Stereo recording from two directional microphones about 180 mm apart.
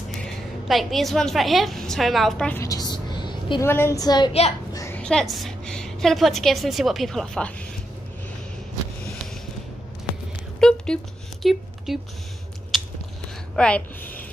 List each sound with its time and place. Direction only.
0.2 s a woman's voice: centre (ahead or behind)
2.6 s a sound: 20° left (ahead or behind)
3.6 s a woman's voice: 15° left (ahead or behind)
4.3 s a child's voice: 35° left (ahead or behind)
4.7 s a sound: 15° left (ahead or behind)
5.0 s a woman's voice: centre (ahead or behind)
10.6 s a sound: 5° left (ahead or behind)
11.4 s speech: centre (ahead or behind)
12.7 s biting: centre (ahead or behind)
13.6 s speech: 5° left (ahead or behind)